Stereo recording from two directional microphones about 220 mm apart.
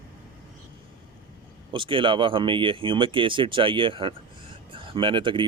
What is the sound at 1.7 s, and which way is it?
Speech, 20° right (ahead or behind).